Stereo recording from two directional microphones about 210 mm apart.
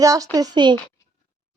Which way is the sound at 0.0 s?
15° right (ahead or behind).